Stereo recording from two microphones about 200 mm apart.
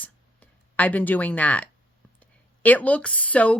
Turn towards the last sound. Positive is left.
turn(degrees=5)  # may be behind; listen again after turning